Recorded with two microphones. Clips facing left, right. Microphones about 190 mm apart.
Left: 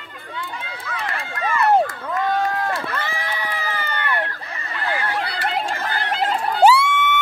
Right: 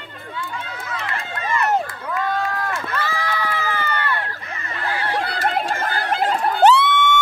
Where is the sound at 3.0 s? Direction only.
20° left (ahead or behind).